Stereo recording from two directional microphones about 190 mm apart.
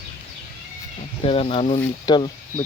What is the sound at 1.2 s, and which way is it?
Speech, 30° left (ahead or behind).